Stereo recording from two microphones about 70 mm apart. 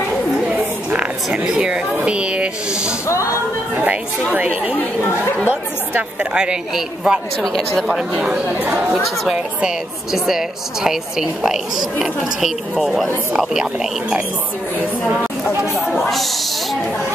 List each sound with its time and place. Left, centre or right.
0.5 s a sound: centre
2.0 s speech: centre
6.3 s a woman's voice: centre
7.5 s a woman's voice: centre
8.5 s speech: right
9.2 s a woman's voice: centre
15.9 s a woman's voice: centre